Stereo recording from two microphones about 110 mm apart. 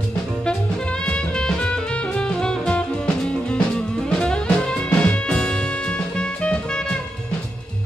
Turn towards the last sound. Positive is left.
turn(degrees=10)  # may be behind; listen again after turning